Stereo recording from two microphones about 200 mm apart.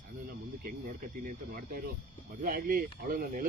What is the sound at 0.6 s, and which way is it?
Speech, 45° right (ahead or behind).